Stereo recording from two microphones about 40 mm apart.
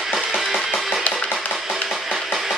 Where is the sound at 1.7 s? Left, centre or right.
Centre.